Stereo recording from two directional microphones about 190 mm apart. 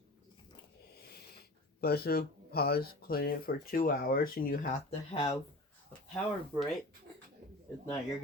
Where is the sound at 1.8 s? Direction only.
55° left (ahead or behind).